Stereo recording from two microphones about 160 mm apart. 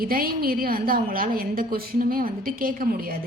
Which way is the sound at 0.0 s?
65° right (ahead or behind).